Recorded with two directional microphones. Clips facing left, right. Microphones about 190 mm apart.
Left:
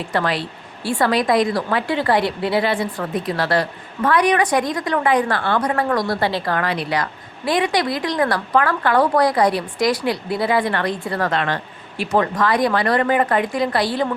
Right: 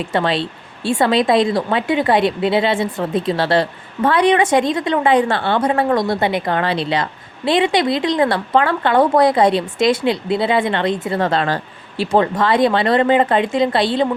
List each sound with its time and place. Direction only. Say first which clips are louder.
0.0 s a woman's voice: right 3 dB; 25° right (ahead or behind)